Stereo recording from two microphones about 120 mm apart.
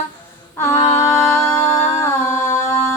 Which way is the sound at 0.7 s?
65° left (ahead or behind).